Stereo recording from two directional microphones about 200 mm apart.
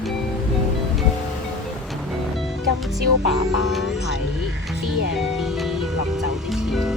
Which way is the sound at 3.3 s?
Centre (ahead or behind).